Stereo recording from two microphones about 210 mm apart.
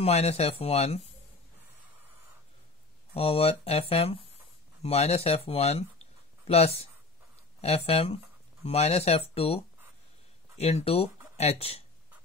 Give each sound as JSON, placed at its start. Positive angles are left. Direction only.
{"t": 0.0, "sound": "speech", "side_deg": 30}
{"t": 3.2, "sound": "speech", "side_deg": 30}